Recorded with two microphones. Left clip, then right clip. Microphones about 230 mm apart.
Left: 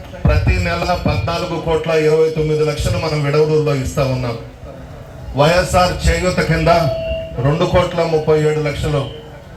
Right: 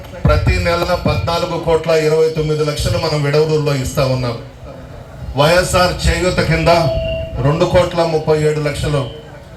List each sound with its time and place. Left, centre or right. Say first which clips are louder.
0.2 s a man's voice: right 3 dB; right
5.4 s a man's voice: right 1 dB; right